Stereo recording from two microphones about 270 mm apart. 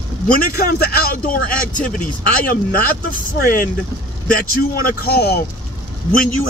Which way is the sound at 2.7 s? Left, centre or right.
Left.